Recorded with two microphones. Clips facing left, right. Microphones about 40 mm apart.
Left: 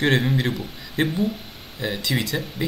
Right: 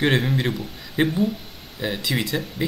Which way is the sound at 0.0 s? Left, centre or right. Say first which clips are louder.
Even; centre.